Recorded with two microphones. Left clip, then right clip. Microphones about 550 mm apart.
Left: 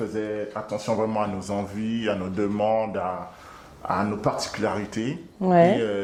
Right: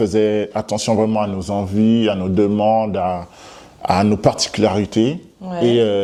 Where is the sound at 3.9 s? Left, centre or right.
Right.